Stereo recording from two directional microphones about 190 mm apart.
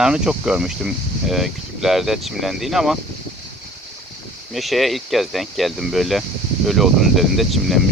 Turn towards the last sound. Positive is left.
turn(degrees=0)  # may be behind; listen again after turning